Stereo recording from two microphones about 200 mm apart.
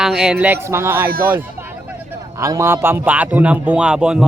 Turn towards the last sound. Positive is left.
turn(degrees=-5)  # may be behind; listen again after turning